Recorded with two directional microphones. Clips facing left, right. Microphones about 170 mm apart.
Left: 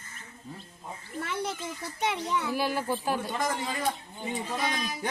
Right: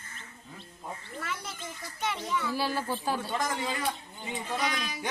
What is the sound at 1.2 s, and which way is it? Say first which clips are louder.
A child's voice: left 7 dB; 55° left (ahead or behind).